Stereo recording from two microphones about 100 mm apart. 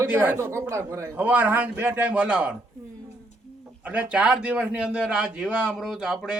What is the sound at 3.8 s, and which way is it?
A man's voice, 10° right (ahead or behind).